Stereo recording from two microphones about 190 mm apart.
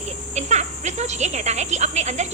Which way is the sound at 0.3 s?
35° right (ahead or behind).